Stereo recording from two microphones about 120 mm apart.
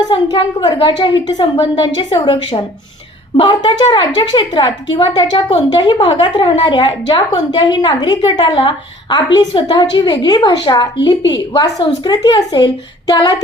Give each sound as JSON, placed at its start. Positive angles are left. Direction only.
{"t": 0.0, "sound": "a woman's voice", "side_deg": 40}